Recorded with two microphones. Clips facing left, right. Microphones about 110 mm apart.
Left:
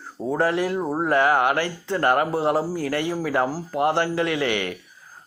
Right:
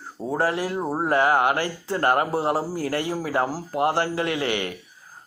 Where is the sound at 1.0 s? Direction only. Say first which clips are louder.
Even; 30° right (ahead or behind).